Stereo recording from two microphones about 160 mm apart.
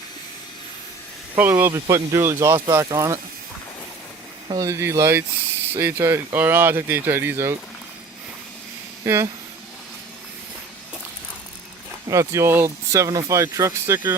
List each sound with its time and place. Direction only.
1.4 s speech: 15° right (ahead or behind)
4.4 s speech: 25° right (ahead or behind)
9.0 s speech: 15° right (ahead or behind)
12.0 s speech: 20° right (ahead or behind)